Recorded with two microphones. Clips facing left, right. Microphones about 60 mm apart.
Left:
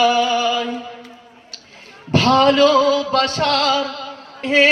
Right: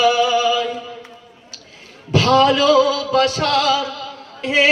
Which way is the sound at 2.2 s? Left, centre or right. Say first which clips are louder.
Left 1 dB; centre.